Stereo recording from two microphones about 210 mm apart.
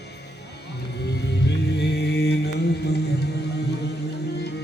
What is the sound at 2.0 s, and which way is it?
Mantra, 55° left (ahead or behind).